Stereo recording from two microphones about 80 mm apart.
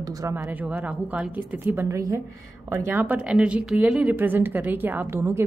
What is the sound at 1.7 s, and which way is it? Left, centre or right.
A woman's voice, right.